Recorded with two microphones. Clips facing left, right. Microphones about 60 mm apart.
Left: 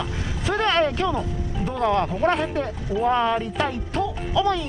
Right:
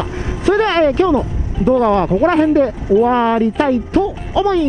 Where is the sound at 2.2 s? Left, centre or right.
Right.